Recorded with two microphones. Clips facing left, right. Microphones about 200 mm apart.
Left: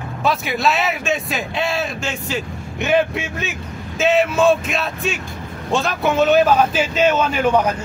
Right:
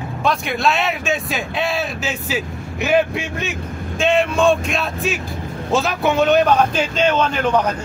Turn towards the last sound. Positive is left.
turn(degrees=10)  # may be behind; listen again after turning